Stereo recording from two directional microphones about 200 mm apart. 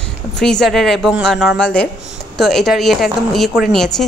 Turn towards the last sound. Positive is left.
turn(degrees=0)  # may be behind; listen again after turning